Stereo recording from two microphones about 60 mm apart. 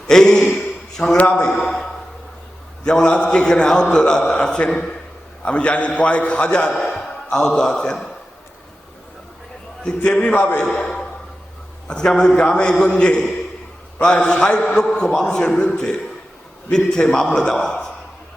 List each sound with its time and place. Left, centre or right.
0.1 s a man's voice: centre
1.1 s a man's voice: left
1.5 s a man's voice: centre
6.7 s a man's voice: centre
7.3 s a man's voice: centre
9.8 s a man's voice: centre
10.6 s a man's voice: centre